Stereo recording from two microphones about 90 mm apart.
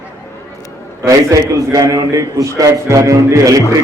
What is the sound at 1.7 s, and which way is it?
A man's voice, 35° right (ahead or behind).